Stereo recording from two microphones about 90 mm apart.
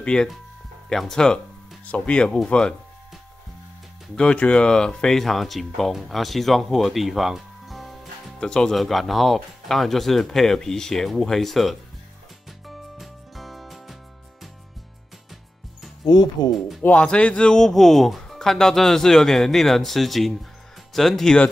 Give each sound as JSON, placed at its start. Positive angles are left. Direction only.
{"t": 0.0, "sound": "speech", "side_deg": 10}
{"t": 4.1, "sound": "speech", "side_deg": 10}
{"t": 12.6, "sound": "music", "side_deg": 0}
{"t": 16.0, "sound": "speech", "side_deg": 50}
{"t": 16.5, "sound": "speech", "side_deg": 0}
{"t": 16.8, "sound": "speech", "side_deg": 15}